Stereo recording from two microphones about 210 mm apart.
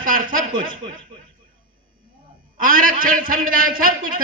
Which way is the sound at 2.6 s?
40° right (ahead or behind).